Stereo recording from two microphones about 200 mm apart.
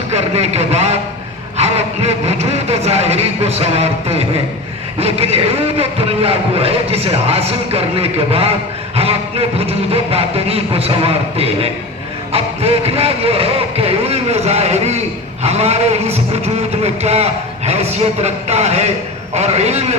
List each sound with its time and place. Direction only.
0.1 s a man's voice: 35° right (ahead or behind)